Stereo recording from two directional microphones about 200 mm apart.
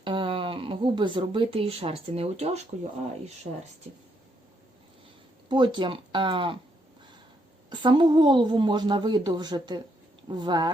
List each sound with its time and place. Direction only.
0.0 s speech: 25° right (ahead or behind)
5.5 s a woman's voice: 25° right (ahead or behind)
7.7 s a woman's voice: 25° right (ahead or behind)